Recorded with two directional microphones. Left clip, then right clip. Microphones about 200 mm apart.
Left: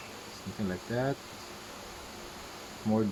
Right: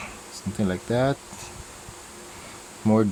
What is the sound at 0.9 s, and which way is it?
Speech, 45° right (ahead or behind).